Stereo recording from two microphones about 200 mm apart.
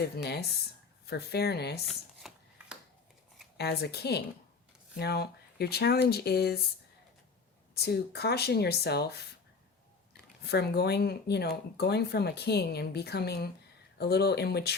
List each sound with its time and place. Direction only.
0.0 s speech: 55° left (ahead or behind)
1.9 s a sound: centre (ahead or behind)
3.6 s speech: 55° left (ahead or behind)
7.8 s speech: 55° left (ahead or behind)
10.4 s speech: 55° left (ahead or behind)